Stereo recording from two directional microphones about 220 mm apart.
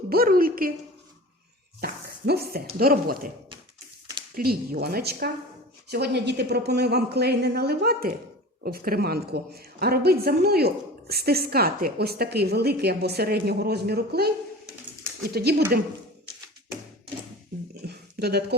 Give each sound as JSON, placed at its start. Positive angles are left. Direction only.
{"t": 0.1, "sound": "a woman's voice", "side_deg": -40}
{"t": 1.8, "sound": "speech", "side_deg": -45}
{"t": 4.4, "sound": "a woman's voice", "side_deg": -40}
{"t": 17.8, "sound": "a sound", "side_deg": -45}